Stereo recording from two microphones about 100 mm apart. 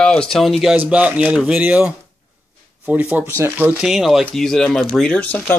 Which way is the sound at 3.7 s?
5° right (ahead or behind).